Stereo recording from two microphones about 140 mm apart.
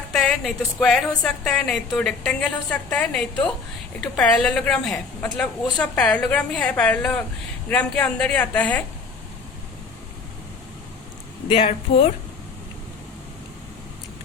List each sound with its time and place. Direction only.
0.1 s a woman's voice: 5° left (ahead or behind)
11.4 s speech: 40° left (ahead or behind)